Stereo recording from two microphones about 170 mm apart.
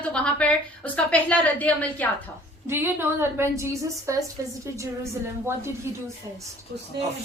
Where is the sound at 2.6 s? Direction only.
15° right (ahead or behind).